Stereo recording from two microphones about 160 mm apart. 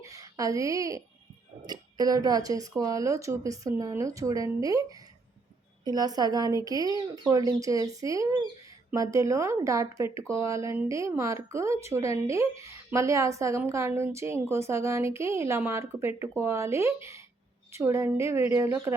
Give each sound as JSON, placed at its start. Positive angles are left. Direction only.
{"t": 0.0, "sound": "a woman's voice", "side_deg": -20}